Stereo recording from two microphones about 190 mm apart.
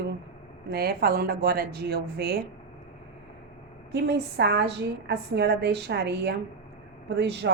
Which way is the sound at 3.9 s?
60° right (ahead or behind).